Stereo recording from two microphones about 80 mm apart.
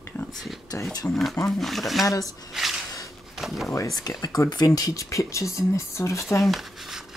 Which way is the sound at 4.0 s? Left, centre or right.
Left.